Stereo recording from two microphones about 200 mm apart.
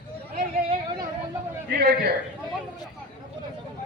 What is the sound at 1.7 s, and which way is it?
Speech, 50° right (ahead or behind).